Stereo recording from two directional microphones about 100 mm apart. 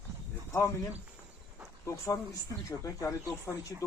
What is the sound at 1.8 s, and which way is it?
Speech, 30° left (ahead or behind).